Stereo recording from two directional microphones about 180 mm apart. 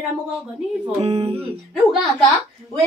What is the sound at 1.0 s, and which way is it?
Speech, 35° right (ahead or behind).